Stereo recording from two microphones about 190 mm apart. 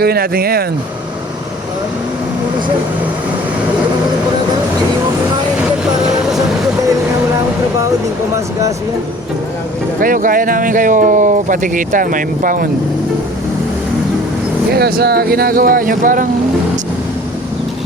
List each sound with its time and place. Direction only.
0.0 s speech: 55° right (ahead or behind)
10.0 s speech: 45° right (ahead or behind)
14.7 s speech: 55° right (ahead or behind)